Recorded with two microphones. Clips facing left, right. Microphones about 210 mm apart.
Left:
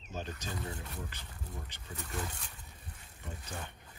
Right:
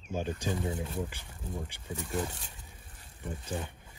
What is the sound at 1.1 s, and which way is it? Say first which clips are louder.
Speech: right 2 dB; 10° right (ahead or behind).